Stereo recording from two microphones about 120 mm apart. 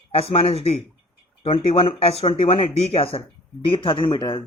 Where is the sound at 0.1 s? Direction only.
55° left (ahead or behind).